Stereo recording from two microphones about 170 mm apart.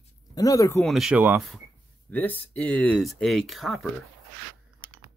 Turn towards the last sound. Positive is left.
turn(degrees=0)  # may be behind; listen again after turning